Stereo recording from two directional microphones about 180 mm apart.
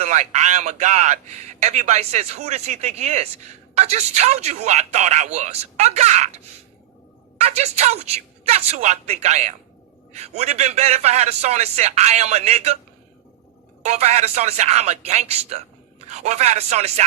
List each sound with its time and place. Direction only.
0.0 s a man's voice: 40° right (ahead or behind)
13.8 s a man's voice: 40° right (ahead or behind)